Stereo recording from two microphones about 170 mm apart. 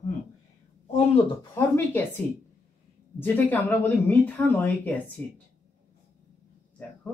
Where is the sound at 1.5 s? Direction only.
15° left (ahead or behind).